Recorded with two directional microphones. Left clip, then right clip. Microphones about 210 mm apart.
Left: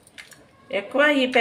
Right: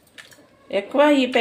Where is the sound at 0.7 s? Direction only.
15° right (ahead or behind).